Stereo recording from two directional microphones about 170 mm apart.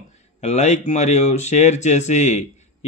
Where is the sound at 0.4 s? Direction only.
40° left (ahead or behind).